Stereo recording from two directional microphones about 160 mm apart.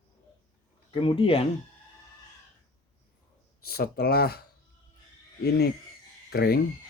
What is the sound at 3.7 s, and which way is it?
Speech, 75° left (ahead or behind).